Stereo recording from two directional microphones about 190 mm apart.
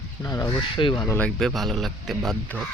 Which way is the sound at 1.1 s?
5° left (ahead or behind).